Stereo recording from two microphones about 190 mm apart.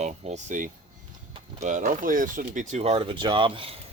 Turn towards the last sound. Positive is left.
turn(degrees=-30)  # may be behind; listen again after turning